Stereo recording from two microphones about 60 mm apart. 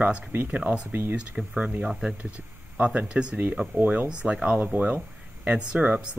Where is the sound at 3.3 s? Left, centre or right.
Right.